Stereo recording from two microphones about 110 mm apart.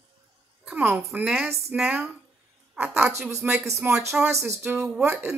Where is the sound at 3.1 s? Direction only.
25° right (ahead or behind).